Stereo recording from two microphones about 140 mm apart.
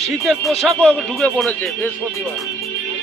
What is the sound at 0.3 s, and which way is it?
Speech, centre (ahead or behind).